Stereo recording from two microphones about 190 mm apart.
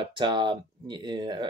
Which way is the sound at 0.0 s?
25° right (ahead or behind).